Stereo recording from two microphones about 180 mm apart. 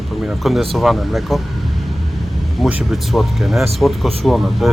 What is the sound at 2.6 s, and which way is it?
Mantra, centre (ahead or behind).